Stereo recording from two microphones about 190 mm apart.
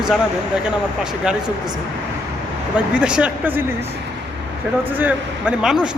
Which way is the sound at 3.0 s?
5° right (ahead or behind).